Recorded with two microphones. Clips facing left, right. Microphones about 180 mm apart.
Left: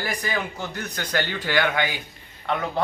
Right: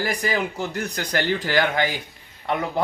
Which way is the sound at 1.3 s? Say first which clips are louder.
Right 4 dB; 40° right (ahead or behind).